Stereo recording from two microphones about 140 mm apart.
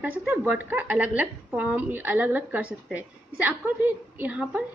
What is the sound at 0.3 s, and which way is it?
A woman's voice, 10° right (ahead or behind).